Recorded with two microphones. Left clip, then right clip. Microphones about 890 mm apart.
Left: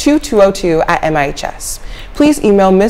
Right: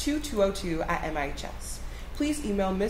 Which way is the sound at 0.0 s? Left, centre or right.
Left.